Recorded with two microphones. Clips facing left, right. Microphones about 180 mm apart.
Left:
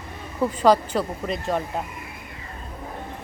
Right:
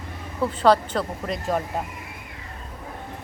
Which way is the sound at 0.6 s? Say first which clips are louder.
Even; 10° left (ahead or behind).